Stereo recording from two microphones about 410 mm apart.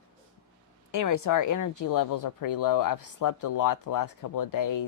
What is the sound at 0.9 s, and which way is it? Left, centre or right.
Speech, left.